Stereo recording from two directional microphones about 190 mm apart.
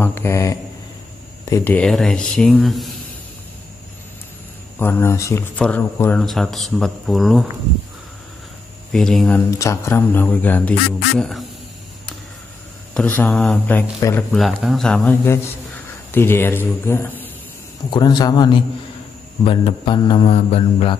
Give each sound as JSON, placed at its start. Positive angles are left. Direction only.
{"t": 0.0, "sound": "speech", "side_deg": 10}
{"t": 4.7, "sound": "speech", "side_deg": 10}
{"t": 8.9, "sound": "speech", "side_deg": 0}
{"t": 9.5, "sound": "speech", "side_deg": 15}
{"t": 12.9, "sound": "speech", "side_deg": 5}
{"t": 14.3, "sound": "speech", "side_deg": 0}
{"t": 17.8, "sound": "speech", "side_deg": 25}